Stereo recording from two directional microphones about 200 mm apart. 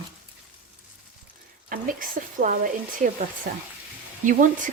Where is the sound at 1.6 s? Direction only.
45° right (ahead or behind).